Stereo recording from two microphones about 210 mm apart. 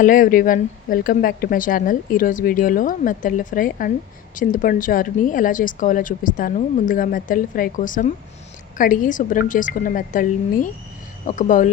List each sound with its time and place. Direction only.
0.0 s speech: 40° left (ahead or behind)